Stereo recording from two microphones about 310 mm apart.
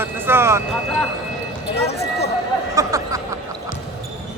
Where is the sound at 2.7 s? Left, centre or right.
Centre.